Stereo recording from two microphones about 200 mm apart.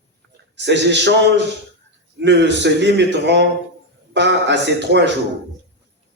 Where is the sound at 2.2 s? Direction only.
60° right (ahead or behind).